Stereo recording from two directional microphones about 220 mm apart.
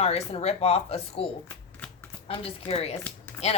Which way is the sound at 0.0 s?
25° left (ahead or behind).